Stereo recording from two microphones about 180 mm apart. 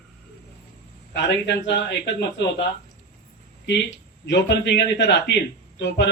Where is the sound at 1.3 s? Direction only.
75° left (ahead or behind).